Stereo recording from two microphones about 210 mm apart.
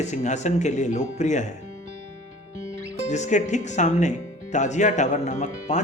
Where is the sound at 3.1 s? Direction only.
35° left (ahead or behind).